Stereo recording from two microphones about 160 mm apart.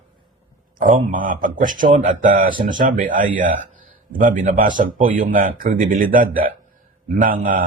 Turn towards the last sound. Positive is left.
turn(degrees=-55)  # may be behind; listen again after turning